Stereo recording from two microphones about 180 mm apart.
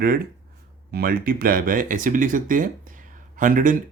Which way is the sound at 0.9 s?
60° right (ahead or behind).